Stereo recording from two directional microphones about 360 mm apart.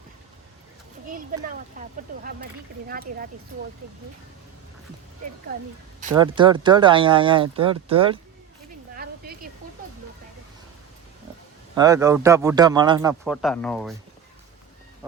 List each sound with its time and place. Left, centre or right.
1.3 s speech: right
6.0 s speech: centre
9.0 s a sound: right
11.7 s speech: centre
13.3 s speech: centre